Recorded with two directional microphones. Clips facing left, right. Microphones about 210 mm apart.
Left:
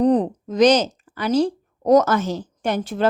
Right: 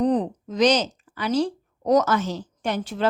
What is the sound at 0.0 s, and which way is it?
Speech, 50° left (ahead or behind).